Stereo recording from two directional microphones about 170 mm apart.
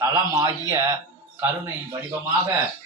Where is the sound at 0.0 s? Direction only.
20° right (ahead or behind).